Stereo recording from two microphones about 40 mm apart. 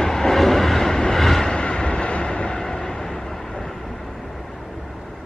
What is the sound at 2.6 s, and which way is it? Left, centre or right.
Vehicle, centre.